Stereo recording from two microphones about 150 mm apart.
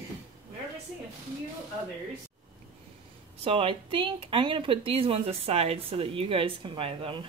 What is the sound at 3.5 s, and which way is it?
Speech, 35° right (ahead or behind).